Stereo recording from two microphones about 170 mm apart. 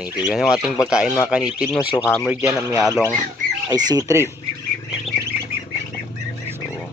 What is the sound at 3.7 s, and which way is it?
Speech, 25° right (ahead or behind).